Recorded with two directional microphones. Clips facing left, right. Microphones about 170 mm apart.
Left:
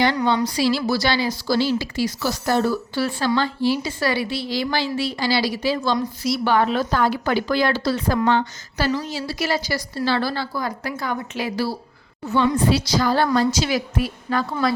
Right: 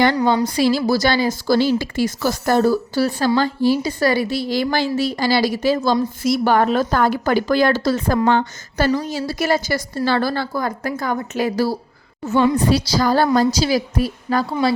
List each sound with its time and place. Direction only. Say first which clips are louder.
0.2 s a woman's voice: right 3 dB; 30° right (ahead or behind)
0.4 s a woman's voice: right 3 dB; 50° right (ahead or behind)